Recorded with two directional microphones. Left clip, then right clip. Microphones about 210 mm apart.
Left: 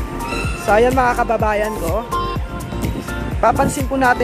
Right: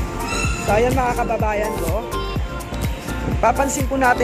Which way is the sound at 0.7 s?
25° left (ahead or behind).